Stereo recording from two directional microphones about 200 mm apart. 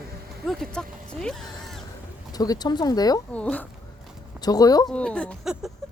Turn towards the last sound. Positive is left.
turn(degrees=0)  # may be behind; listen again after turning